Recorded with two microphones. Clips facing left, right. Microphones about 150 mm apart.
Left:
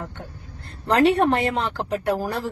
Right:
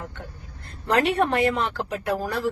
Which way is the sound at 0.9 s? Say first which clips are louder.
Left 4 dB; 35° left (ahead or behind).